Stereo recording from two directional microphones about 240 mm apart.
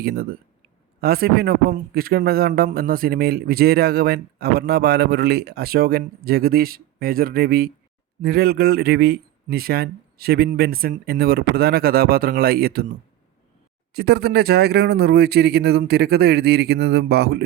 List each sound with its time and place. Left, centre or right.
0.0 s a man's voice: right
13.9 s a man's voice: right